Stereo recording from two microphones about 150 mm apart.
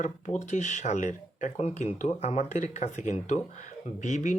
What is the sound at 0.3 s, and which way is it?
Speech, 55° left (ahead or behind).